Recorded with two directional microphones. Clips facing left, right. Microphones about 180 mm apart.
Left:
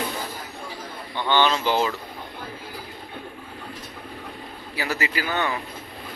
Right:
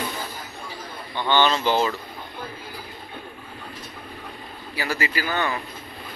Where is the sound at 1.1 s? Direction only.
15° right (ahead or behind).